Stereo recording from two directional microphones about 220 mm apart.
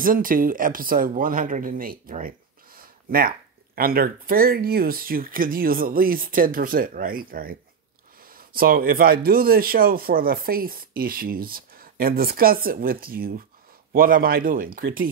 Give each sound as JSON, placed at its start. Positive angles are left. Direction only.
{"t": 0.0, "sound": "speech", "side_deg": -40}